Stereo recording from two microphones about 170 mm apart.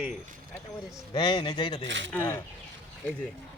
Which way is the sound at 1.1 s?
25° left (ahead or behind).